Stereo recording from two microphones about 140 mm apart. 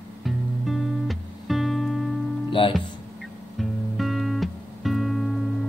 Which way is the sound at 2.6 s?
35° left (ahead or behind).